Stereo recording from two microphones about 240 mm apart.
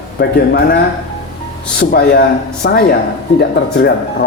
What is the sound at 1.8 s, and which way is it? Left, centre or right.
A man's voice, left.